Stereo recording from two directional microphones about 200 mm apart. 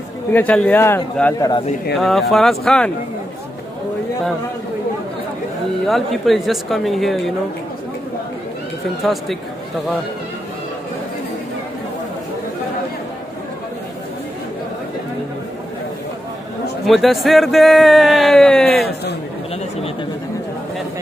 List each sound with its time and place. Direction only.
0.3 s a man's voice: 5° left (ahead or behind)
5.9 s speech: centre (ahead or behind)
9.0 s speech: centre (ahead or behind)
16.8 s speech: centre (ahead or behind)
18.7 s speech: 50° left (ahead or behind)